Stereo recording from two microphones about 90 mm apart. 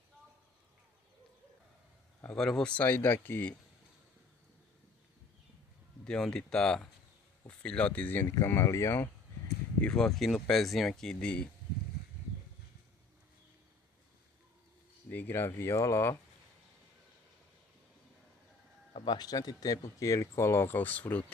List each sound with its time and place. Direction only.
2.3 s speech: 5° left (ahead or behind); by 3.5 s 25° left (ahead or behind)
6.0 s speech: 10° left (ahead or behind); by 9.1 s 30° left (ahead or behind)
9.8 s speech: 10° left (ahead or behind)
15.0 s speech: 20° left (ahead or behind)
18.9 s speech: 50° left (ahead or behind); by 21.3 s 20° left (ahead or behind)